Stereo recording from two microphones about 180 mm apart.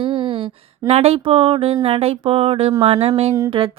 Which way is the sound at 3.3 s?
20° right (ahead or behind).